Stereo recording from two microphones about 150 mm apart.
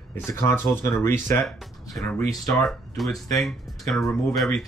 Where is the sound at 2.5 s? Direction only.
Centre (ahead or behind).